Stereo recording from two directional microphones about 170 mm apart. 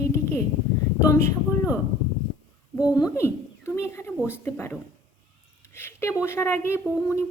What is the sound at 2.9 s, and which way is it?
A woman's voice, 20° left (ahead or behind).